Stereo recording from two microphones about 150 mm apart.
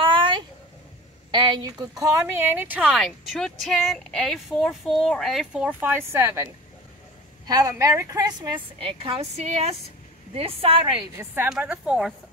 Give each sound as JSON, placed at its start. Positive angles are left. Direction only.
{"t": 0.0, "sound": "a sound", "side_deg": -35}
{"t": 1.3, "sound": "a woman's voice", "side_deg": -30}
{"t": 8.7, "sound": "a woman's voice", "side_deg": -40}
{"t": 11.4, "sound": "speech", "side_deg": -5}